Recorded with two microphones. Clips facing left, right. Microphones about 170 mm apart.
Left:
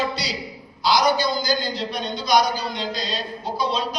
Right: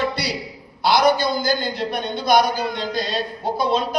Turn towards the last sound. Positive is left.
turn(degrees=-50)  # may be behind; listen again after turning